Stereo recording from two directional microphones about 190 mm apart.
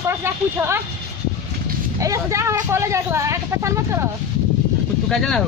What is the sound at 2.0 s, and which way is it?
A woman's voice, 15° right (ahead or behind).